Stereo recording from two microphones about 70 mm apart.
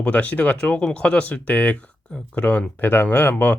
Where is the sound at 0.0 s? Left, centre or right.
Centre.